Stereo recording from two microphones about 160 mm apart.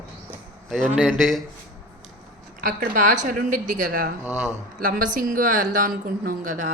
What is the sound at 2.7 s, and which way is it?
A woman's voice, 55° right (ahead or behind).